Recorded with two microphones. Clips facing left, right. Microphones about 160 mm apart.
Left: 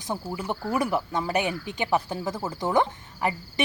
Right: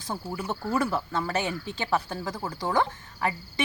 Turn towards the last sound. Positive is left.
turn(degrees=20)  # may be behind; listen again after turning